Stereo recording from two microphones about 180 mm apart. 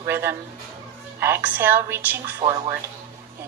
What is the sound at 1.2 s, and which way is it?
Music, 10° right (ahead or behind).